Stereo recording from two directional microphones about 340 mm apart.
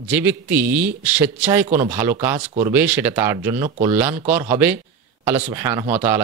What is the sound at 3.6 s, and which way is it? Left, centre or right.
Speech, centre.